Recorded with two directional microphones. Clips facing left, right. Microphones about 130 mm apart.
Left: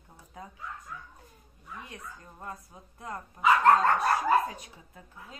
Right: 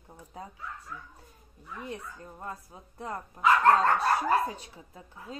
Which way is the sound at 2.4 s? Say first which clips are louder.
Right 1 dB; 25° right (ahead or behind).